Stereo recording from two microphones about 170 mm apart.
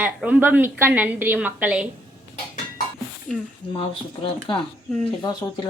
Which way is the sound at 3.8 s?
30° left (ahead or behind).